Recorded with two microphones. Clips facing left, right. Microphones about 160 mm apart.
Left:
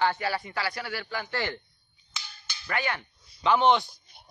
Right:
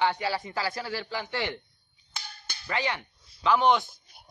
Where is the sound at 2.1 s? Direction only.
55° right (ahead or behind).